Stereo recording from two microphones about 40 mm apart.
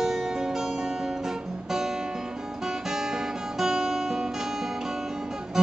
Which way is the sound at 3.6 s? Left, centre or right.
Centre.